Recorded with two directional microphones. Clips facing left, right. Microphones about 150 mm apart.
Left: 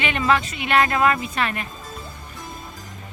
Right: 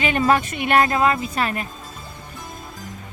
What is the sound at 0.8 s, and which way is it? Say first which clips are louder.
Speech: right 1 dB; 30° right (ahead or behind).